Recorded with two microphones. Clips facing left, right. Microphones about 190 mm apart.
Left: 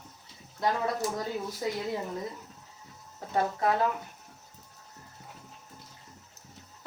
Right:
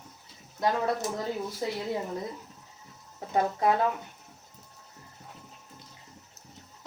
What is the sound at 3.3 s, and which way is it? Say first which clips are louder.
Speech: right 2 dB; 20° right (ahead or behind).